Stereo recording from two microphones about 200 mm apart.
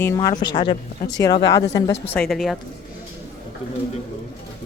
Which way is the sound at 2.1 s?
Centre (ahead or behind).